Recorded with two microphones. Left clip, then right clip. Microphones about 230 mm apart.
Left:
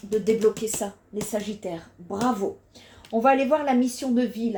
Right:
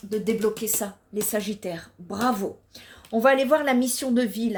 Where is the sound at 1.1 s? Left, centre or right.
Right.